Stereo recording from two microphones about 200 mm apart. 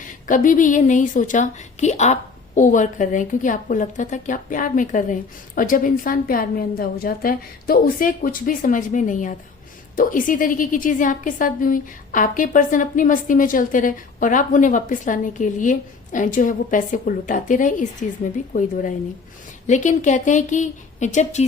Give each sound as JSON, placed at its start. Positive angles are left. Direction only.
{"t": 0.3, "sound": "a woman's voice", "side_deg": 40}